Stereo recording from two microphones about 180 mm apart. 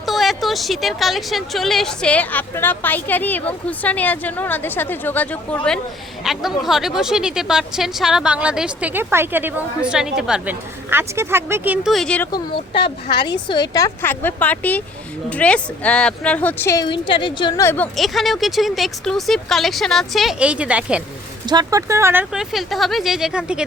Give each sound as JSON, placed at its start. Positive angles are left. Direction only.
{"t": 0.0, "sound": "a woman's voice", "side_deg": 0}
{"t": 13.1, "sound": "a woman's voice", "side_deg": 65}
{"t": 13.3, "sound": "speech", "side_deg": 25}
{"t": 17.9, "sound": "a woman's voice", "side_deg": 0}
{"t": 21.4, "sound": "a woman's voice", "side_deg": -25}